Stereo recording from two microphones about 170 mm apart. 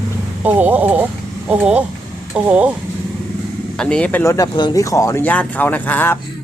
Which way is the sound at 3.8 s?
5° left (ahead or behind).